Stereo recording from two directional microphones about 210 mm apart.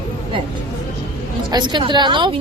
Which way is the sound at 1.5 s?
20° right (ahead or behind).